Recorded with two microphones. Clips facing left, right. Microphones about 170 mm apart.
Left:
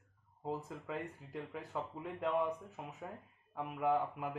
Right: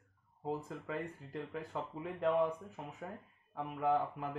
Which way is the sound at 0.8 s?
5° left (ahead or behind).